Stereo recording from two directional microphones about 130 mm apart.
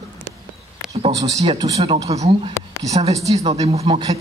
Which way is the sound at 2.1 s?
55° right (ahead or behind).